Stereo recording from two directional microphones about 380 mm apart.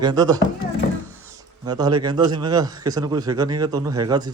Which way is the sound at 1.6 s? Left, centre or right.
Centre.